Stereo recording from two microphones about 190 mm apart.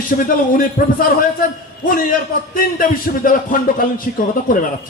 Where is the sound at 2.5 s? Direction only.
50° left (ahead or behind).